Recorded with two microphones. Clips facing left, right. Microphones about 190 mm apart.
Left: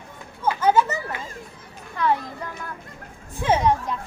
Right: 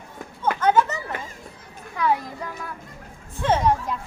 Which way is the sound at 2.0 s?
10° right (ahead or behind).